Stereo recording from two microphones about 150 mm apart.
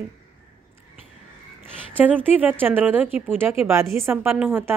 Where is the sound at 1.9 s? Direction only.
10° right (ahead or behind).